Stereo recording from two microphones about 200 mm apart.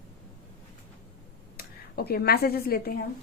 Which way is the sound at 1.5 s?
50° left (ahead or behind).